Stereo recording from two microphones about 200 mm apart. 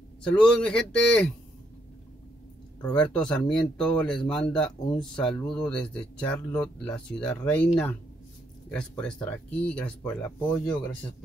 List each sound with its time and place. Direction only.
0.2 s speech: 5° left (ahead or behind)
2.8 s speech: 5° left (ahead or behind)